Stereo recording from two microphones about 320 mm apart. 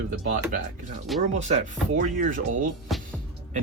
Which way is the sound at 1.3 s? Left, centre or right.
Right.